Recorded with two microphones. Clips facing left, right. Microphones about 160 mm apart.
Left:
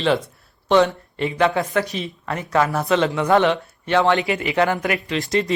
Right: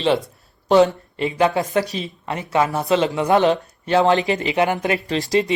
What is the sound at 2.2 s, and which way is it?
A man's voice, 25° right (ahead or behind).